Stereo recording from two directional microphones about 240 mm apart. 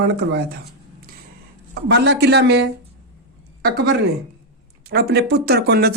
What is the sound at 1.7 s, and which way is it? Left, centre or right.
Speech, right.